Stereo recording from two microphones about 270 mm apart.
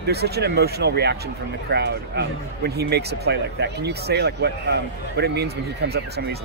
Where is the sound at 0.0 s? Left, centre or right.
Right.